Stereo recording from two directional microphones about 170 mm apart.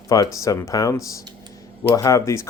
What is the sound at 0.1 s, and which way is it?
Speech, 20° left (ahead or behind).